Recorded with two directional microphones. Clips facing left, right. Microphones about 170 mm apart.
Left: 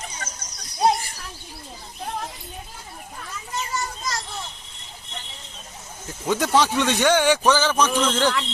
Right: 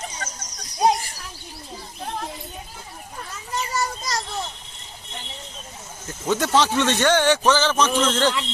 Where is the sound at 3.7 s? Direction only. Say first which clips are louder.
Right 4 dB; 40° right (ahead or behind).